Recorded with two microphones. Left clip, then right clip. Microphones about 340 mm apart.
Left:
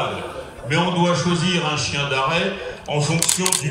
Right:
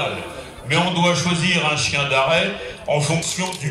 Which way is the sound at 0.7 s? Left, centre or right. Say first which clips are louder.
Right 1 dB; right.